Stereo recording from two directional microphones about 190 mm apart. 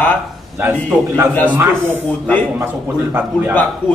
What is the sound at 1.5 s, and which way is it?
Speech, 10° right (ahead or behind).